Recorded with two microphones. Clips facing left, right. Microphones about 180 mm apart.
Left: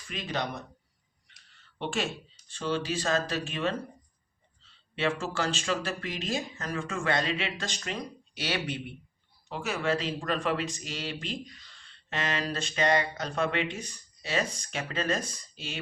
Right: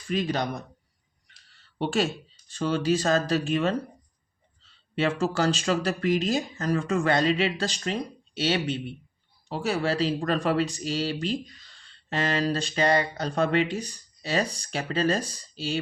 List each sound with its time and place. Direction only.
0.1 s speech: 40° right (ahead or behind)
1.8 s speech: 40° right (ahead or behind)